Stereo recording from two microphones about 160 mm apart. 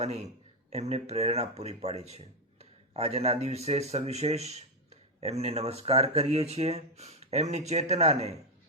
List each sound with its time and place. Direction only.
0.0 s a man's voice: 45° right (ahead or behind)